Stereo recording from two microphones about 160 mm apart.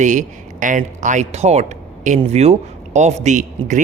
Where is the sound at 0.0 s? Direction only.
50° right (ahead or behind).